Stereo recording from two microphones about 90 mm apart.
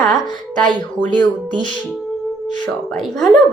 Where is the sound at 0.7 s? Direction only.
15° left (ahead or behind).